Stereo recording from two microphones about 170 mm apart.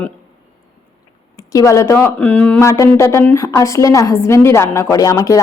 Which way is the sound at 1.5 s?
20° left (ahead or behind).